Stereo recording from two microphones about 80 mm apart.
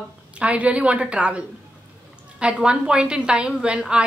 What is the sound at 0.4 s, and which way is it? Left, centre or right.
A woman's voice, centre.